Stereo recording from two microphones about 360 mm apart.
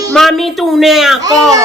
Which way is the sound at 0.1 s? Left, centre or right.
Centre.